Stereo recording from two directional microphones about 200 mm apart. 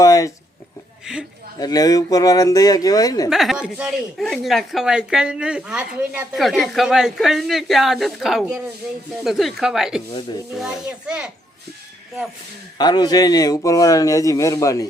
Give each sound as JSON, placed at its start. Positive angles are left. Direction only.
{"t": 0.0, "sound": "a sound", "side_deg": 15}
{"t": 1.5, "sound": "a man's voice", "side_deg": 20}
{"t": 3.2, "sound": "speech", "side_deg": 0}
{"t": 12.8, "sound": "a man's voice", "side_deg": 20}